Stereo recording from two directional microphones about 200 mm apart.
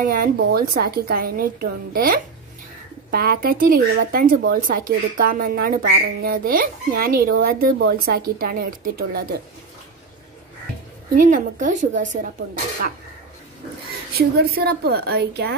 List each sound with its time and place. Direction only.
0.0 s speech: 45° right (ahead or behind)
11.1 s a woman's voice: 40° right (ahead or behind)
14.1 s speech: 50° right (ahead or behind)